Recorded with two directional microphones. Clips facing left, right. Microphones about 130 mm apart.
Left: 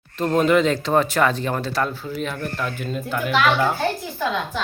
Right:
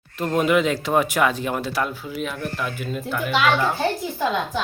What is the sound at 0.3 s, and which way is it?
Speech, 5° right (ahead or behind).